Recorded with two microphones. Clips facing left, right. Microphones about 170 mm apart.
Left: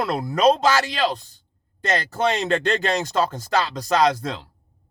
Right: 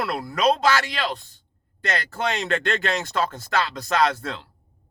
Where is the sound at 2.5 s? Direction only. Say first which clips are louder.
Left 3 dB; 20° left (ahead or behind).